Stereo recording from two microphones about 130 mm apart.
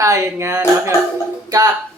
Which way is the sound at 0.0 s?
25° right (ahead or behind).